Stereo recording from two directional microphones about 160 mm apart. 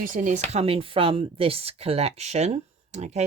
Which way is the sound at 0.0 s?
55° right (ahead or behind).